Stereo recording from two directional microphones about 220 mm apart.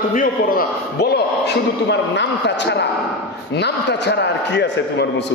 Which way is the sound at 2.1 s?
50° left (ahead or behind).